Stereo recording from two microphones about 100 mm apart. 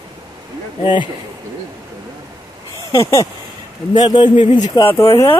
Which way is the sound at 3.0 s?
30° left (ahead or behind).